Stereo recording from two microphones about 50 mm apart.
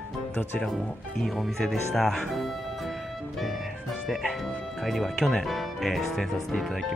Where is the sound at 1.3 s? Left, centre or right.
Centre.